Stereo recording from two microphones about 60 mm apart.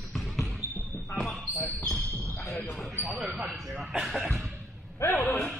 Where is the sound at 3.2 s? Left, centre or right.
Right.